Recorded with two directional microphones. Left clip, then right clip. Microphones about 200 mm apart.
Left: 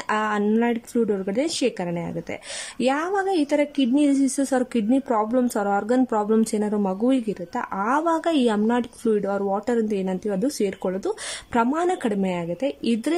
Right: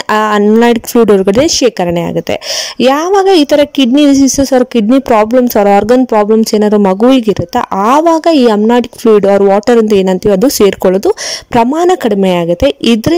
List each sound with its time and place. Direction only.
0.1 s a woman's voice: 35° right (ahead or behind)